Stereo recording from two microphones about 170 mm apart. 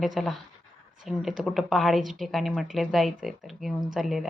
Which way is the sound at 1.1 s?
Centre (ahead or behind).